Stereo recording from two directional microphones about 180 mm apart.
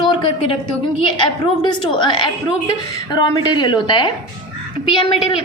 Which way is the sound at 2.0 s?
25° left (ahead or behind).